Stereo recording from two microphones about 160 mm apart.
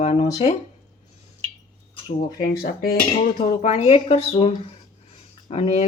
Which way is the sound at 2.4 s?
65° left (ahead or behind).